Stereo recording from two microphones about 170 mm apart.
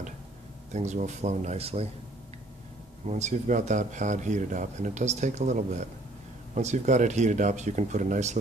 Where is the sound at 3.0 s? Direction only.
40° right (ahead or behind).